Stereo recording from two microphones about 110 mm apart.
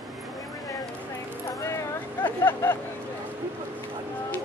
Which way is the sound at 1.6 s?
25° left (ahead or behind).